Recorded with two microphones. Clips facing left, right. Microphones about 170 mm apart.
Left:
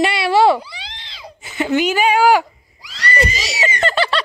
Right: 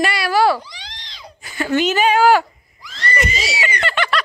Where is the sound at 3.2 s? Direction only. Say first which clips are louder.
Left 2 dB; 40° left (ahead or behind).